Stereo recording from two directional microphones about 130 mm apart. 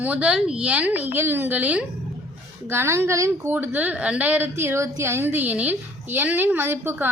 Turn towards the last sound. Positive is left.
turn(degrees=-15)  # may be behind; listen again after turning